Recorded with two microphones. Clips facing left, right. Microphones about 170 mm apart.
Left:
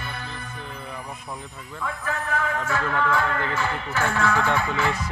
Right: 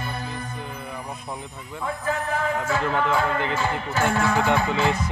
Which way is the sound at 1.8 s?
30° right (ahead or behind).